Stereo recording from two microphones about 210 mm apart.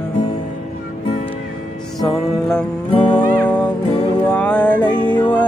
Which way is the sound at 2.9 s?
25° left (ahead or behind).